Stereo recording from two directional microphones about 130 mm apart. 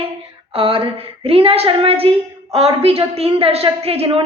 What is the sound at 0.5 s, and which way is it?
A woman's voice, 45° right (ahead or behind).